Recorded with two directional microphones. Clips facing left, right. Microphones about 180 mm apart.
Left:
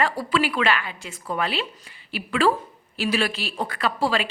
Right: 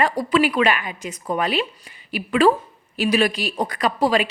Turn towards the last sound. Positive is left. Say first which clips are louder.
# right 4 dB
turn(degrees=-15)  # may be behind; listen again after turning